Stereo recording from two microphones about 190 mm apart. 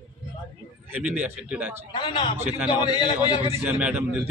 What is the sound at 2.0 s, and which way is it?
A man's voice, 25° left (ahead or behind).